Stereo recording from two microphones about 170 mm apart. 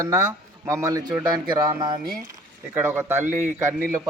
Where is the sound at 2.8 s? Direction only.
15° right (ahead or behind).